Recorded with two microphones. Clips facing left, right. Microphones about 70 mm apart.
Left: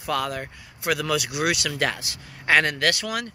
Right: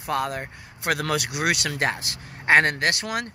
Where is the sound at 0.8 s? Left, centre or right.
Right.